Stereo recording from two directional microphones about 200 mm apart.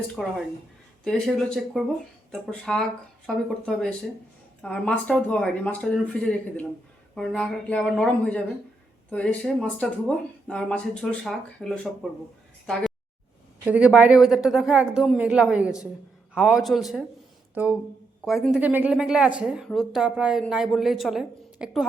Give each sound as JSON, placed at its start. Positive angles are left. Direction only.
{"t": 0.2, "sound": "speech", "side_deg": 0}
{"t": 13.7, "sound": "speech", "side_deg": -5}